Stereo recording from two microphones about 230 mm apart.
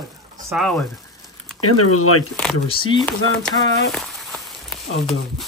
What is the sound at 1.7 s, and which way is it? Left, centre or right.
Speech, left.